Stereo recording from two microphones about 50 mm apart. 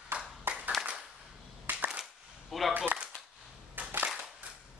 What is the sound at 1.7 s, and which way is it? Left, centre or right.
Cap gun, right.